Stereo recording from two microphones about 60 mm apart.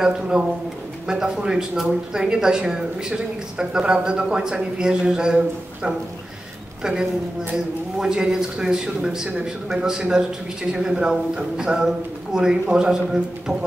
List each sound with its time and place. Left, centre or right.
0.0 s a woman's voice: centre